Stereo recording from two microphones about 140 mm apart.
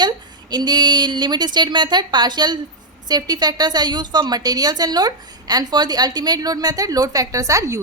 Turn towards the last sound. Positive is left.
turn(degrees=-20)  # may be behind; listen again after turning